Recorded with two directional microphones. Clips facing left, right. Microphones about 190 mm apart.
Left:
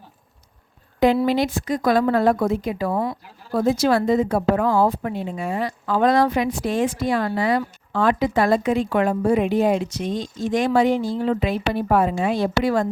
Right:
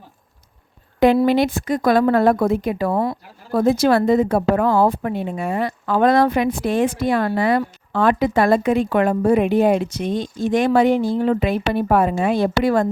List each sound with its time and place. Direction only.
0.9 s a woman's voice: 60° right (ahead or behind)